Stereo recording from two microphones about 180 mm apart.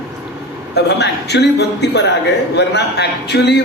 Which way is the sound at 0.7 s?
70° left (ahead or behind).